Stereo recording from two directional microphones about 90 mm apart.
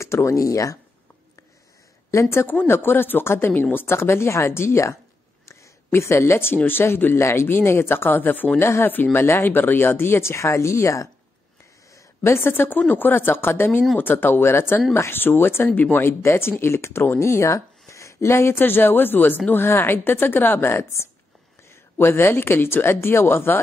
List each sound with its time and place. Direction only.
0.0 s speech: 35° left (ahead or behind)
2.0 s speech: 30° left (ahead or behind)